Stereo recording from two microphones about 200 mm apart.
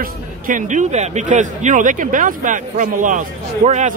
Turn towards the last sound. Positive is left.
turn(degrees=-35)  # may be behind; listen again after turning